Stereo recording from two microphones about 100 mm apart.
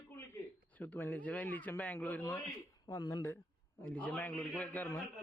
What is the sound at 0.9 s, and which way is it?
Speech, 15° left (ahead or behind).